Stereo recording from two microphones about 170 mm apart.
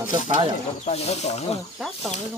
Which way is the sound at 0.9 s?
40° left (ahead or behind).